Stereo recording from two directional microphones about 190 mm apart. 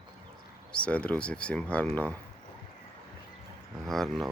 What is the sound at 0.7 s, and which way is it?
Speech, 5° left (ahead or behind).